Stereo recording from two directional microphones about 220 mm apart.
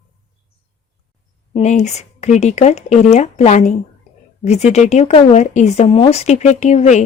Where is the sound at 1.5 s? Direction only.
30° left (ahead or behind).